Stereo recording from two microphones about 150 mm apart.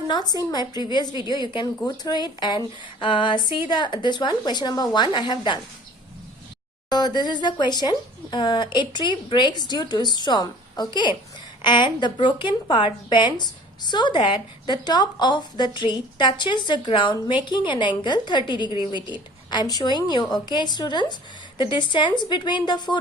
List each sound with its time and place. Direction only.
0.1 s a woman's voice: 30° left (ahead or behind)
6.9 s a woman's voice: 30° left (ahead or behind)